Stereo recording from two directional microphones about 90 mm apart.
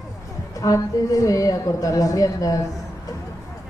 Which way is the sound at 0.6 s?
40° left (ahead or behind).